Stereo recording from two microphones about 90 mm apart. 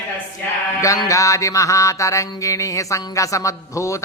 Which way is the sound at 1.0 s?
35° left (ahead or behind).